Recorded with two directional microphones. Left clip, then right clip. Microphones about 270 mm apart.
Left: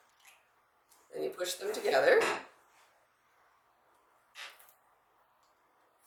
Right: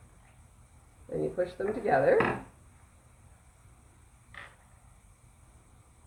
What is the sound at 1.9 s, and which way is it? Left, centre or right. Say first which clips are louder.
Speech: right 1 dB; left.